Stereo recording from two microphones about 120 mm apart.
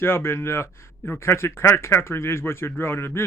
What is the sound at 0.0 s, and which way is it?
Speech, 20° left (ahead or behind).